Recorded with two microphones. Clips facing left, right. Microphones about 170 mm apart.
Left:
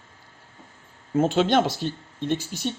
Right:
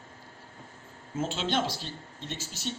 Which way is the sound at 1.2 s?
55° left (ahead or behind).